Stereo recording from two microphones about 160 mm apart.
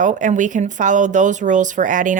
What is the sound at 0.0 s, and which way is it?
Speech, 50° right (ahead or behind).